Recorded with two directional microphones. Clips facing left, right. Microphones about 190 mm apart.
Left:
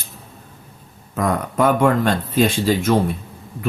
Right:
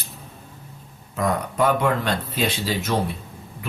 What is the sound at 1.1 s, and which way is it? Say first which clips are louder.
Speech: left 3 dB; 50° left (ahead or behind).